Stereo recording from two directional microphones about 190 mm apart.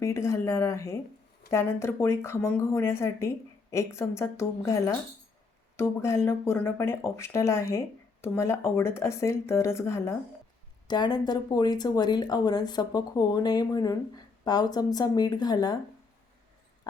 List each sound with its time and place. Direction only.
0.0 s speech: 15° left (ahead or behind)